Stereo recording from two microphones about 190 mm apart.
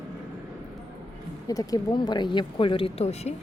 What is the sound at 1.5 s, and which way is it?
Speech, 20° left (ahead or behind).